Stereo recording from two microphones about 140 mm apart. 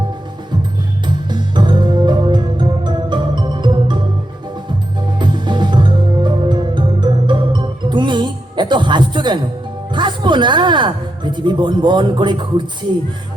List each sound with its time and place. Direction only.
1.0 s music: 35° right (ahead or behind)
9.9 s a woman's voice: 35° right (ahead or behind)